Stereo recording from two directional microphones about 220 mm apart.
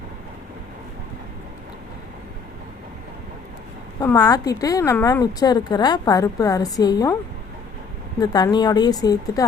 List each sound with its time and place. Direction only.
4.0 s a woman's voice: 15° left (ahead or behind)
8.2 s a woman's voice: 15° left (ahead or behind)